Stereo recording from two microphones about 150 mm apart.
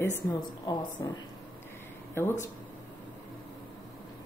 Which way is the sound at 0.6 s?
25° left (ahead or behind).